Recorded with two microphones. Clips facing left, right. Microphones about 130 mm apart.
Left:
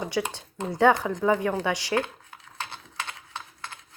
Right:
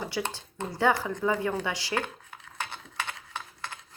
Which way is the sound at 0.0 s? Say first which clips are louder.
Left 4 dB; 20° left (ahead or behind).